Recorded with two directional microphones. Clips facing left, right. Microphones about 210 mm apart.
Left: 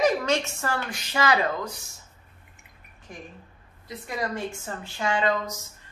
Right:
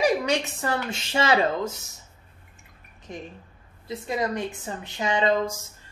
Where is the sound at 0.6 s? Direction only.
20° right (ahead or behind).